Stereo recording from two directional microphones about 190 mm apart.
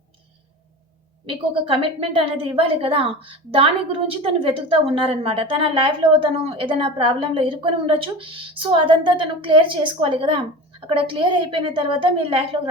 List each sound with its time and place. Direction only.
1.3 s a woman's voice: 30° right (ahead or behind)